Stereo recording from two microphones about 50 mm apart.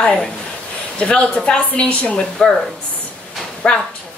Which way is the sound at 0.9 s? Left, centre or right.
Left.